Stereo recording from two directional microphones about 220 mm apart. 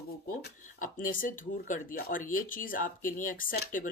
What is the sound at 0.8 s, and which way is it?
Speech, 40° left (ahead or behind).